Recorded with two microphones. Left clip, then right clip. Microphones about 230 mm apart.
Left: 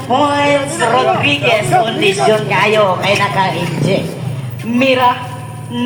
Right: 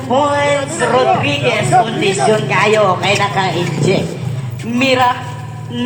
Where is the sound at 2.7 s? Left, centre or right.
Right.